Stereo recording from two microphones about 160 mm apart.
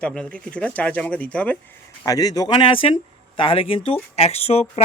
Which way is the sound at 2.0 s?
25° left (ahead or behind).